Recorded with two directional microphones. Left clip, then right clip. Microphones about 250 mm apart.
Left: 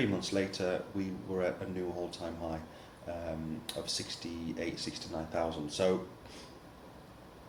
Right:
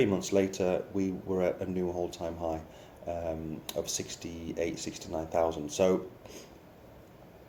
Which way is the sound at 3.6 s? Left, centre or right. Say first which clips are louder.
Right 3 dB; right.